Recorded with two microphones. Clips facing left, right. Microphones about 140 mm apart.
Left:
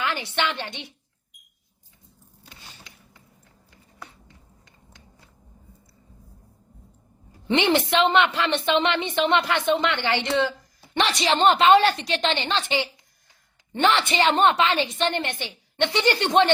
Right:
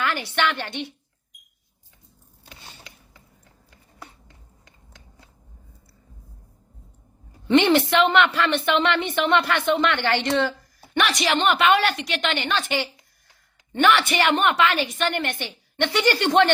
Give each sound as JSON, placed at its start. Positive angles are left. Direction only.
{"t": 0.0, "sound": "a woman's voice", "side_deg": 20}
{"t": 7.4, "sound": "a woman's voice", "side_deg": 20}
{"t": 10.9, "sound": "a woman's voice", "side_deg": 30}